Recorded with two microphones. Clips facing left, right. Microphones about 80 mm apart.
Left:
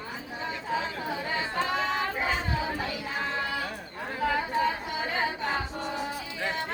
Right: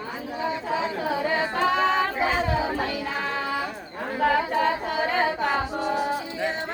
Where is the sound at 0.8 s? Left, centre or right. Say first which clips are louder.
Right 6 dB; right.